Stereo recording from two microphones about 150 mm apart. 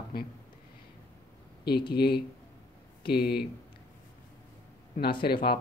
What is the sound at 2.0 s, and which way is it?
Speech, 90° left.